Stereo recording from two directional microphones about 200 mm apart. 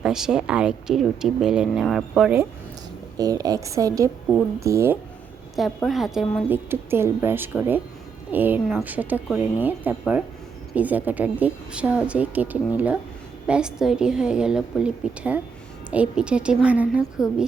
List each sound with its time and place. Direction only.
0.0 s speech: 5° right (ahead or behind)
3.2 s a woman's voice: 20° right (ahead or behind)
5.5 s a woman's voice: centre (ahead or behind)